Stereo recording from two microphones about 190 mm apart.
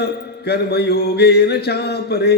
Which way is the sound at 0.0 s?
60° left (ahead or behind).